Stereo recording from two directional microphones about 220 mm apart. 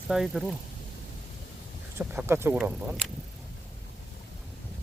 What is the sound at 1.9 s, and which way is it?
Speech, 10° right (ahead or behind).